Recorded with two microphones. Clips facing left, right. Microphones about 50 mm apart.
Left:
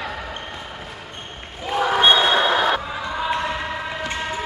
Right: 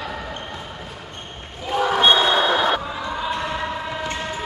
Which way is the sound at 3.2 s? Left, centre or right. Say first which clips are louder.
Left 3 dB; centre.